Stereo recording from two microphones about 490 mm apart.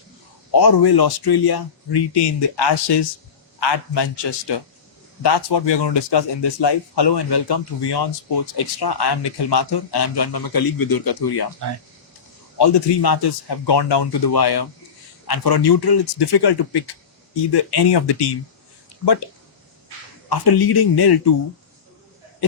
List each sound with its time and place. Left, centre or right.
0.5 s speech: left
12.5 s speech: left
20.3 s speech: left